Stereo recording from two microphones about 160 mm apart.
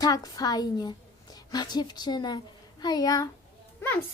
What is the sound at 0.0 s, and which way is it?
A woman's voice, 20° left (ahead or behind).